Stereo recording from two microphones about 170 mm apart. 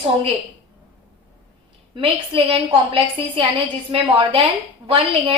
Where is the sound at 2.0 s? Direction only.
30° right (ahead or behind).